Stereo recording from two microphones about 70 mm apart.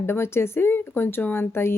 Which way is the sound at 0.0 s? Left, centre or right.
Left.